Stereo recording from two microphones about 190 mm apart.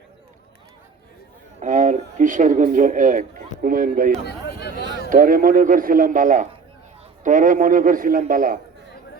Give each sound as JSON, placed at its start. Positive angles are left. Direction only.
{"t": 1.6, "sound": "a man's voice", "side_deg": -40}
{"t": 4.3, "sound": "a sound", "side_deg": 60}
{"t": 5.0, "sound": "a man's voice", "side_deg": -45}